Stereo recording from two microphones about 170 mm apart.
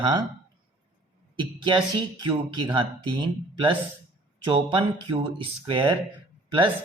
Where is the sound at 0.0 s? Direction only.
25° right (ahead or behind).